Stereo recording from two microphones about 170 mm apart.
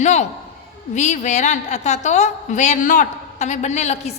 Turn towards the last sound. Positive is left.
turn(degrees=40)  # may be behind; listen again after turning